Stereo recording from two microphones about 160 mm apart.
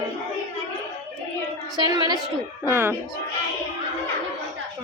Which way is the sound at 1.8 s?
25° right (ahead or behind).